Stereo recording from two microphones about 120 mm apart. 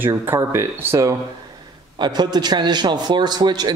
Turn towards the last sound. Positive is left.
turn(degrees=-35)  # may be behind; listen again after turning